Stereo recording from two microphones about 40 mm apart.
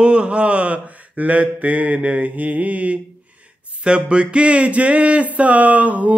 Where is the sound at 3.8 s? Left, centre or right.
Right.